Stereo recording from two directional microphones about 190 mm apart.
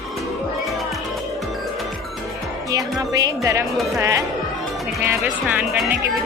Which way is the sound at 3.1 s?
20° right (ahead or behind).